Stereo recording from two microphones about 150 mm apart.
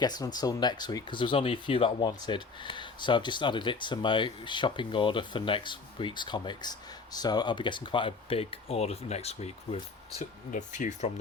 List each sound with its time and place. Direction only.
0.0 s speech: 25° left (ahead or behind); by 11.1 s 55° left (ahead or behind)